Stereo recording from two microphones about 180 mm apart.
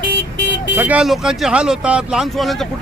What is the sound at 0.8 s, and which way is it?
Speech, 5° right (ahead or behind).